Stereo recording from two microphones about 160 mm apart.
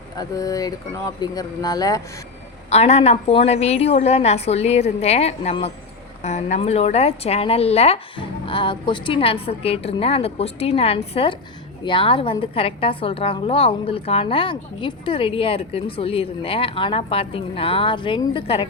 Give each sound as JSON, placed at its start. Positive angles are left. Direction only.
{"t": 0.2, "sound": "speech", "side_deg": 20}
{"t": 2.6, "sound": "a woman's voice", "side_deg": 40}